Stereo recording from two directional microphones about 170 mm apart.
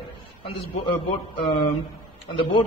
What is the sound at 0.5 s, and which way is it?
A man's voice, 30° left (ahead or behind).